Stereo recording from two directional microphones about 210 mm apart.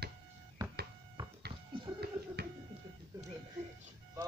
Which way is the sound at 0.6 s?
20° right (ahead or behind).